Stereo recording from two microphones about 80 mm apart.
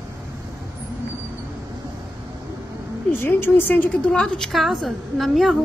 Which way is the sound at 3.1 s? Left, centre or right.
Left.